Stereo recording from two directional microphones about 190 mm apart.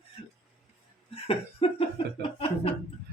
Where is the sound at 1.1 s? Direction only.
30° left (ahead or behind).